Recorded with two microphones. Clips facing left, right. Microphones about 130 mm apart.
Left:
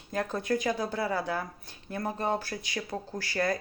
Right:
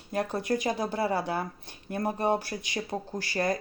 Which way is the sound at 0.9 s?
35° right (ahead or behind).